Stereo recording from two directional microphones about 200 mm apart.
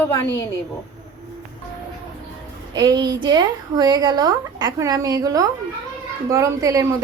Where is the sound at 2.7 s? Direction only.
20° right (ahead or behind).